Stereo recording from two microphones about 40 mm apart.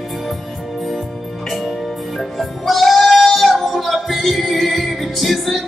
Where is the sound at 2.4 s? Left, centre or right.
Centre.